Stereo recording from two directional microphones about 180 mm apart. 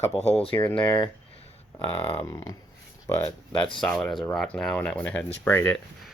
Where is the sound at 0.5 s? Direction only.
10° left (ahead or behind).